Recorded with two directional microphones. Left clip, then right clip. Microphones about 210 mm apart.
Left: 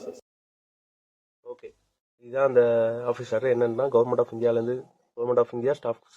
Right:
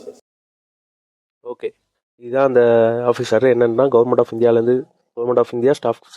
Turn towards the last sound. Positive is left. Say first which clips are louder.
# right 10 dB
turn(degrees=-45)  # may be behind; listen again after turning